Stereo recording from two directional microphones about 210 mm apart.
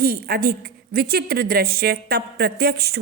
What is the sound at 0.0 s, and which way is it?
A woman's voice, 45° right (ahead or behind).